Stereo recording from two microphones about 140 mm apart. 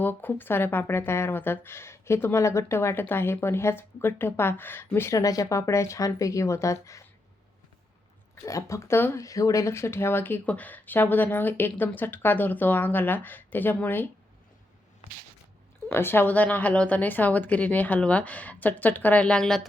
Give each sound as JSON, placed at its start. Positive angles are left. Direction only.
{"t": 0.0, "sound": "speech", "side_deg": 15}
{"t": 8.4, "sound": "speech", "side_deg": 20}
{"t": 15.9, "sound": "speech", "side_deg": 15}